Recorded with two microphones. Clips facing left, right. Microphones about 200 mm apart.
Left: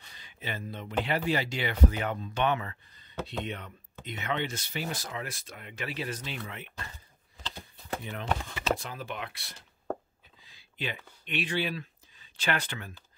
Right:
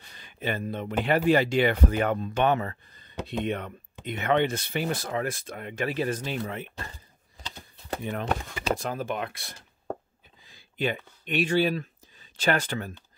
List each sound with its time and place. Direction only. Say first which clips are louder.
0.2 s speech: right 8 dB; 55° right (ahead or behind)
7.9 s speech: right 4 dB; 50° right (ahead or behind)